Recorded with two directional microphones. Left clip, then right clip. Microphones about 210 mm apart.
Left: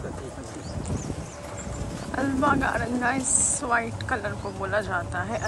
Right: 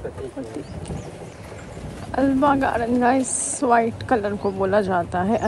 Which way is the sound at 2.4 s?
5° right (ahead or behind).